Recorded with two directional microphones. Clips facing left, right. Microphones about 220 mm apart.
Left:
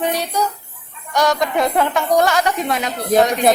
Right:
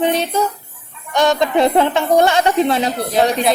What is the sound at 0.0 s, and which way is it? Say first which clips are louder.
A woman's voice: right 3 dB; 25° right (ahead or behind).